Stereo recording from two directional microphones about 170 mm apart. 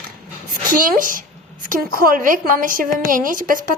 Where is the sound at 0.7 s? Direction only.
55° right (ahead or behind).